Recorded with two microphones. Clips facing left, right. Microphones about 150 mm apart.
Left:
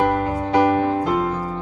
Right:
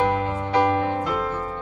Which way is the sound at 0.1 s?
40° left (ahead or behind).